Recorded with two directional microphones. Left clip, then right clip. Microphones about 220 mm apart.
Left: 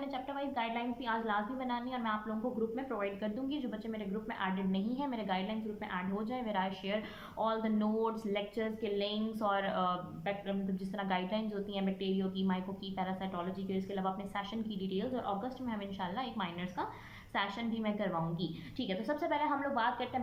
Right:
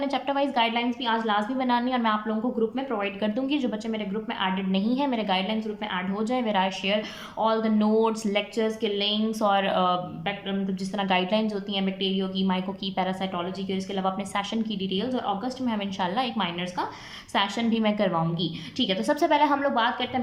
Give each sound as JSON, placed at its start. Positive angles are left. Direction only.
{"t": 0.1, "sound": "a woman's voice", "side_deg": -15}